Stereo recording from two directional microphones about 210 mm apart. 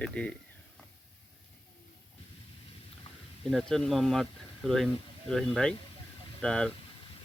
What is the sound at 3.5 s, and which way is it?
Speech, centre (ahead or behind).